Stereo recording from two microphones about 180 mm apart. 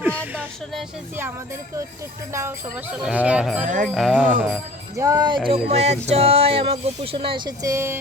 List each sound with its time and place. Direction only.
0.0 s a sound: 10° right (ahead or behind)
2.3 s speech: 15° right (ahead or behind); by 4.3 s centre (ahead or behind)
4.9 s music: 20° right (ahead or behind)